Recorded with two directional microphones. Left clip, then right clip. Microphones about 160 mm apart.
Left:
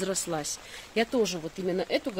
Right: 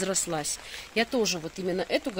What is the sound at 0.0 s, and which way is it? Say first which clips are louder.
Speech: right 1 dB; 10° right (ahead or behind).